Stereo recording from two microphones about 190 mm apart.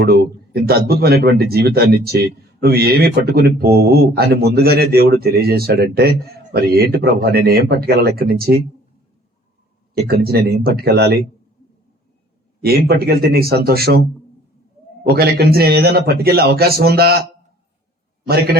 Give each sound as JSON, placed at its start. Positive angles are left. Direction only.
{"t": 0.0, "sound": "speech", "side_deg": -55}
{"t": 9.9, "sound": "speech", "side_deg": -55}
{"t": 12.6, "sound": "speech", "side_deg": -55}
{"t": 15.0, "sound": "speech", "side_deg": -55}